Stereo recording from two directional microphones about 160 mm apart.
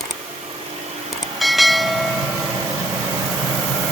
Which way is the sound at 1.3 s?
Centre (ahead or behind).